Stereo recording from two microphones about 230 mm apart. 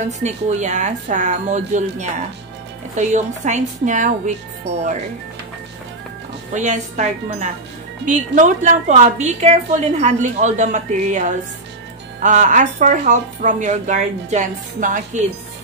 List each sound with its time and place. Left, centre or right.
0.0 s a woman's voice: right
6.5 s a woman's voice: right